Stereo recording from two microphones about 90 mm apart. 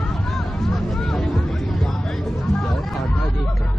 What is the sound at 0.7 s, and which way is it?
Vehicle, 5° left (ahead or behind).